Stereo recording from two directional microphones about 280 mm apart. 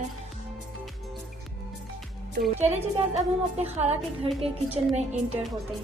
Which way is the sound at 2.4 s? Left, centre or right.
Centre.